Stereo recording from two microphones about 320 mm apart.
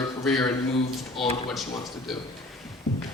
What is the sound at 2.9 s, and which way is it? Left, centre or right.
Heart sounds, left.